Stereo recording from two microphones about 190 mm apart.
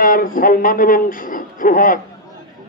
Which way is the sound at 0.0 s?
45° left (ahead or behind).